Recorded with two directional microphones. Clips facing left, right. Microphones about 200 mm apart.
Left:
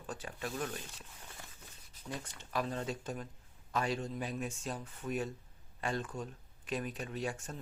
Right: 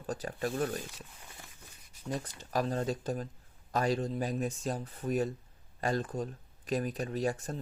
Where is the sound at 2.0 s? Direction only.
35° right (ahead or behind).